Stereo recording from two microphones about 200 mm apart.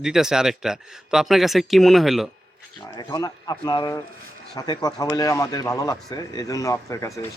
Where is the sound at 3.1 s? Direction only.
20° left (ahead or behind).